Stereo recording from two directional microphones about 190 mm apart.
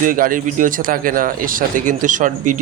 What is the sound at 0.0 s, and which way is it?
Speech, 45° right (ahead or behind).